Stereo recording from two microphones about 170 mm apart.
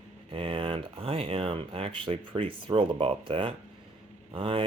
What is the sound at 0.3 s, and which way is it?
Speech, 30° right (ahead or behind).